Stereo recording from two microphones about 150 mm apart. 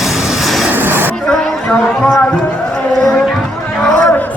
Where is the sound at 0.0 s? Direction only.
Centre (ahead or behind).